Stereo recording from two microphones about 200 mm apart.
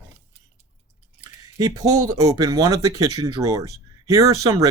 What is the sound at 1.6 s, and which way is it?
Speech, 20° right (ahead or behind).